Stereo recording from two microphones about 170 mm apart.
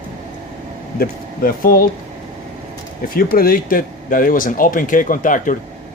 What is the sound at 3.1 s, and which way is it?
Speech, 60° left (ahead or behind).